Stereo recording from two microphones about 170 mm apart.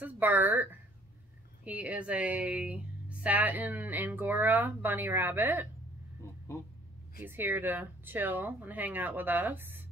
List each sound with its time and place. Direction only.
0.0 s a woman's voice: 10° right (ahead or behind)
6.2 s a sound: 15° left (ahead or behind)
7.2 s a woman's voice: 10° right (ahead or behind)